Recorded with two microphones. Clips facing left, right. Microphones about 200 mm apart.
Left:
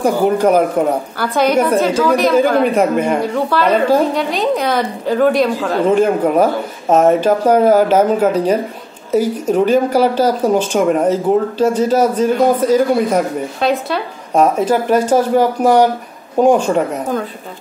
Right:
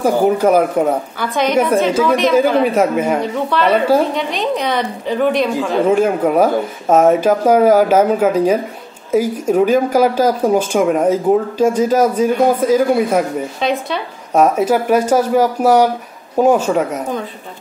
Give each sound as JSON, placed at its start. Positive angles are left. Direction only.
{"t": 0.0, "sound": "a woman's voice", "side_deg": -5}
{"t": 1.2, "sound": "a woman's voice", "side_deg": 5}
{"t": 2.3, "sound": "a woman's voice", "side_deg": -5}
{"t": 14.3, "sound": "a woman's voice", "side_deg": -10}